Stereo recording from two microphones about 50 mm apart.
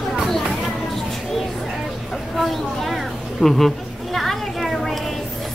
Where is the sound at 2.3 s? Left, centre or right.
Centre.